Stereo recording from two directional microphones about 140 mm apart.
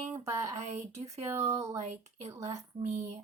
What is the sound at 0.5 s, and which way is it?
Speech, 50° right (ahead or behind).